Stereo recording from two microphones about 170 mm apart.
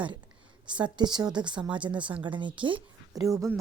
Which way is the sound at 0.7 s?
25° right (ahead or behind).